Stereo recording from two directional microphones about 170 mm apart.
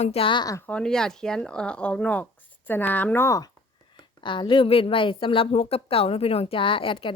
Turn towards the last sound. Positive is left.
turn(degrees=30)  # may be behind; listen again after turning